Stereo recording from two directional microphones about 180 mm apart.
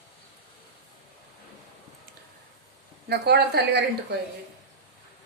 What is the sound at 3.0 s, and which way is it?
Speech, 65° right (ahead or behind).